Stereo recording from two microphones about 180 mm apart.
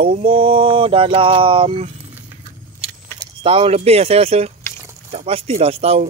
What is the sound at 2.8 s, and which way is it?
Speech, 30° right (ahead or behind).